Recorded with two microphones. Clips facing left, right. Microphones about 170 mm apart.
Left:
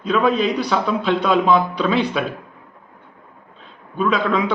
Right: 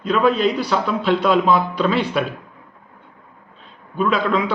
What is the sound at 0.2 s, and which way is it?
A man's voice, 5° right (ahead or behind).